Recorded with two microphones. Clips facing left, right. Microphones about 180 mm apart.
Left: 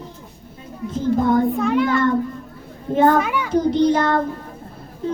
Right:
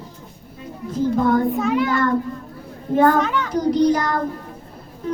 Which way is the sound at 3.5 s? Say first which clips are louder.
Left 1 dB; 25° left (ahead or behind).